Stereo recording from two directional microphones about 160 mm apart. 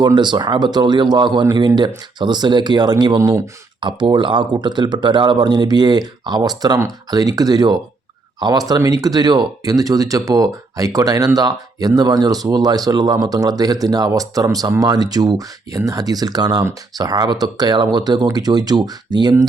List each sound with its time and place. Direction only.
0.0 s speech: 25° right (ahead or behind)